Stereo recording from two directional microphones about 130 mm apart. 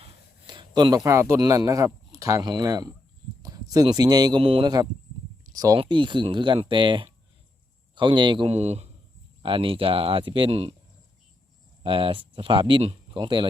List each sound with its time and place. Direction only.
0.4 s a sound: 35° right (ahead or behind)
1.0 s a man's voice: 20° right (ahead or behind); by 4.7 s 40° right (ahead or behind)
5.5 s speech: 30° right (ahead or behind)
8.4 s speech: 55° right (ahead or behind)
9.4 s speech: 40° right (ahead or behind)
11.8 s speech: 40° right (ahead or behind)